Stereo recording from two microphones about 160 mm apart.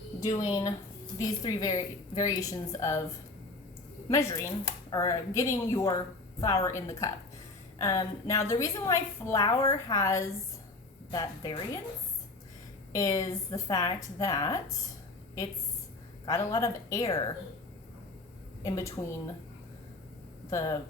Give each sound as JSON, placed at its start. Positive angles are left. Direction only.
{"t": 0.2, "sound": "a woman's voice", "side_deg": 25}
{"t": 4.1, "sound": "a woman's voice", "side_deg": 20}
{"t": 12.9, "sound": "a woman's voice", "side_deg": 20}
{"t": 16.2, "sound": "a woman's voice", "side_deg": 20}
{"t": 18.6, "sound": "a woman's voice", "side_deg": 20}
{"t": 20.5, "sound": "a woman's voice", "side_deg": 20}